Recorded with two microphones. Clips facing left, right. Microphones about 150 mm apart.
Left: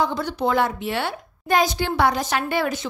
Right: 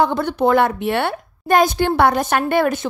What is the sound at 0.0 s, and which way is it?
A woman's voice, 60° right (ahead or behind).